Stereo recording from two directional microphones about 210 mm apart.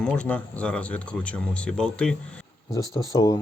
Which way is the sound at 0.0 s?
5° left (ahead or behind).